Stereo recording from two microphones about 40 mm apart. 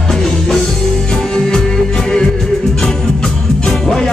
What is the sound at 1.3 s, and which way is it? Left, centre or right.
Music, centre.